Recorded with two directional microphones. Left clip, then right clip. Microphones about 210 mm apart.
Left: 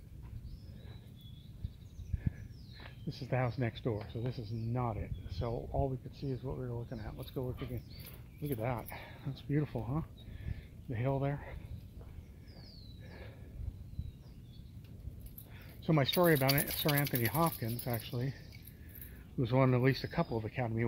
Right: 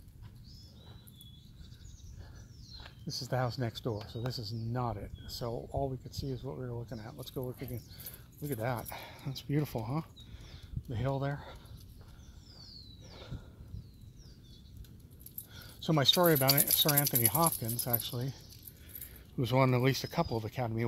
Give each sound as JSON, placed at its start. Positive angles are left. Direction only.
{"t": 2.8, "sound": "speech", "side_deg": -20}
{"t": 15.8, "sound": "speech", "side_deg": -30}
{"t": 19.3, "sound": "speech", "side_deg": -30}